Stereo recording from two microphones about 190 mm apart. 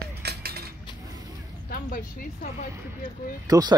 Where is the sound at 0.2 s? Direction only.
55° right (ahead or behind).